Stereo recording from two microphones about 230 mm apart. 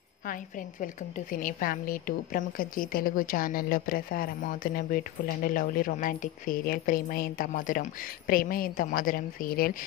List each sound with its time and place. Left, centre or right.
0.3 s a woman's voice: left